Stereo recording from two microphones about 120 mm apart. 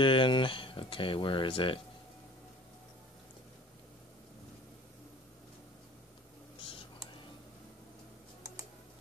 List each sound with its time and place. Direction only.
0.0 s speech: 45° left (ahead or behind)